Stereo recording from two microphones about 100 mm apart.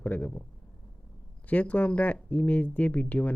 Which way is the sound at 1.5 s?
15° left (ahead or behind).